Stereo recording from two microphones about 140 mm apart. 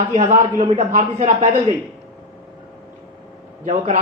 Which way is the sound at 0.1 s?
55° right (ahead or behind).